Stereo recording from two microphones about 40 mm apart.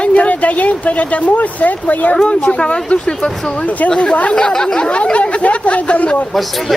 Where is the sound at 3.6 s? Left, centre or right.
Left.